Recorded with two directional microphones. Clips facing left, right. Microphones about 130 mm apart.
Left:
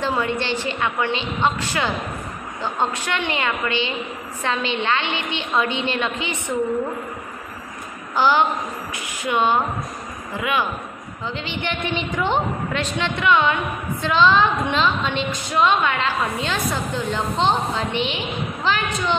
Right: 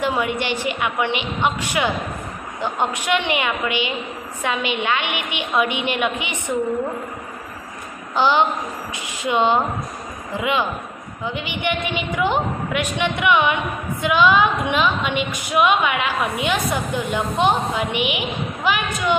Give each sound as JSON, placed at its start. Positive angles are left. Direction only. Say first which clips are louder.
{"t": 0.0, "sound": "a woman's voice", "louder": "right 1 dB", "side_deg": -15}
{"t": 8.2, "sound": "a woman's voice", "louder": "even", "side_deg": -20}